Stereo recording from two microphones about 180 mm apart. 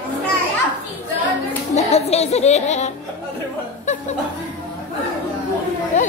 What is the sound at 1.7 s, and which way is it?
Music, 35° left (ahead or behind).